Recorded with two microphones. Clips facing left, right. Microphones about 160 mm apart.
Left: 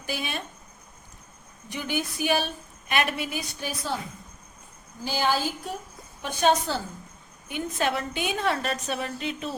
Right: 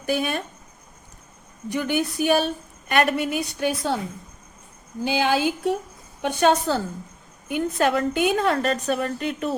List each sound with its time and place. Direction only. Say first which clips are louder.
0.0 s a woman's voice: right 8 dB; 50° right (ahead or behind)
1.7 s a woman's voice: right 6 dB; 60° right (ahead or behind)
5.0 s a woman's voice: right 5 dB; 60° right (ahead or behind)